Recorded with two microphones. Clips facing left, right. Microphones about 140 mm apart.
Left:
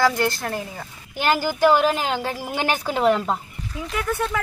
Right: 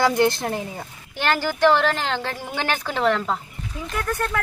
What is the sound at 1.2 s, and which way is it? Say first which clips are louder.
A woman's voice: left 1 dB; 10° left (ahead or behind).